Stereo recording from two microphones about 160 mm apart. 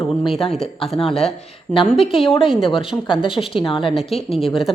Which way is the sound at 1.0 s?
35° left (ahead or behind).